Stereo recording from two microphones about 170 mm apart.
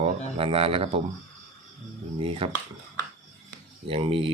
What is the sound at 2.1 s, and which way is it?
Speech, 35° right (ahead or behind).